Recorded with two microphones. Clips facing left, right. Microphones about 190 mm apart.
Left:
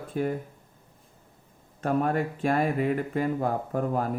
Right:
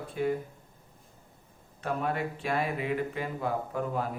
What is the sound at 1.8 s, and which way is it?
Speech, 45° left (ahead or behind).